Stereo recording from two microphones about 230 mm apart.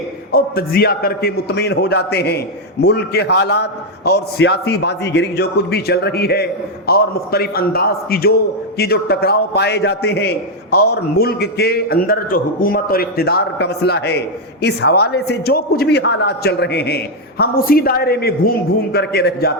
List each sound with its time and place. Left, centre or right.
0.3 s a man's voice: left